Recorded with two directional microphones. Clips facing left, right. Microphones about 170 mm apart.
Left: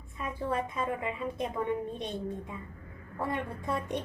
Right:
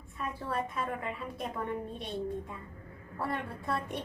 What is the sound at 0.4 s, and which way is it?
A woman's voice, 15° left (ahead or behind).